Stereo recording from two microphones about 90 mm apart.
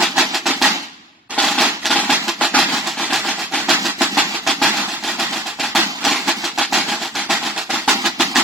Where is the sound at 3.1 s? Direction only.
Centre (ahead or behind).